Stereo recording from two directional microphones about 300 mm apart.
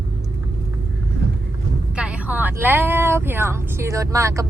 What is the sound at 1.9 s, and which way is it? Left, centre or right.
Speech, centre.